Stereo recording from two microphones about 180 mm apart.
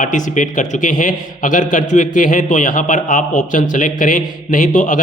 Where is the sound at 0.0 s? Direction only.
45° left (ahead or behind).